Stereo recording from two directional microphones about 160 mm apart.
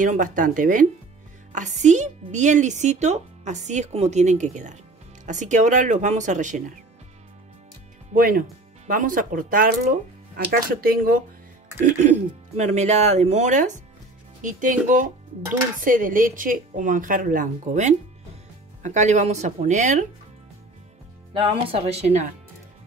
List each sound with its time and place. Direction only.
0.0 s a woman's voice: 55° right (ahead or behind)
8.1 s speech: 60° right (ahead or behind)
11.8 s a woman's voice: 45° right (ahead or behind)
21.3 s speech: 35° right (ahead or behind)